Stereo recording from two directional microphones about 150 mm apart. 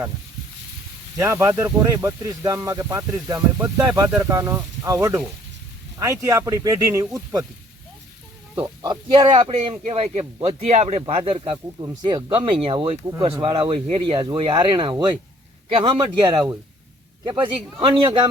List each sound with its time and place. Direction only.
1.2 s speech: 15° right (ahead or behind)
8.8 s speech: 30° right (ahead or behind); by 11.0 s 45° right (ahead or behind)
11.0 s speech: 35° right (ahead or behind)